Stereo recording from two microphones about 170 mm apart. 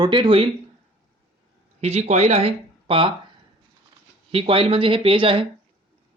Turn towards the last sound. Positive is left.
turn(degrees=-30)  # may be behind; listen again after turning